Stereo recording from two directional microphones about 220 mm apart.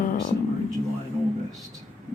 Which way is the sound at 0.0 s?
35° left (ahead or behind).